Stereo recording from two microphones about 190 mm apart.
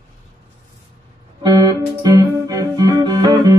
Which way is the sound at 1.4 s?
20° right (ahead or behind).